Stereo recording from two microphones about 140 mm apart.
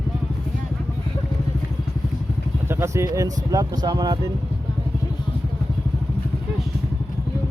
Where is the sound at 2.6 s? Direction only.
20° right (ahead or behind).